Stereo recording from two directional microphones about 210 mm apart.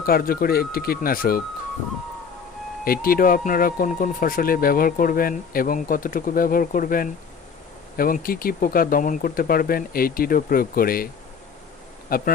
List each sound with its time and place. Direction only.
0.0 s speech: 45° left (ahead or behind)
2.8 s speech: 45° left (ahead or behind)
12.1 s speech: 45° left (ahead or behind)